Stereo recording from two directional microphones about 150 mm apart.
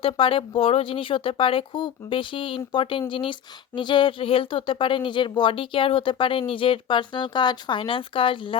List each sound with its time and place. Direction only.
0.0 s speech: 35° left (ahead or behind)